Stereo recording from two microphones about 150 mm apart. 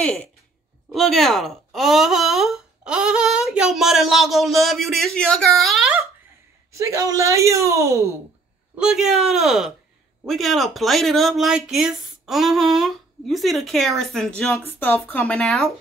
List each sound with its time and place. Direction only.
0.0 s speech: 10° left (ahead or behind)
6.7 s speech: 20° right (ahead or behind)
8.7 s speech: 5° right (ahead or behind)
14.7 s speech: 15° left (ahead or behind)